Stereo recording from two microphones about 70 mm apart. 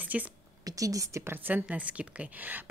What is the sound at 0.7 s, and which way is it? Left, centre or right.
Speech, right.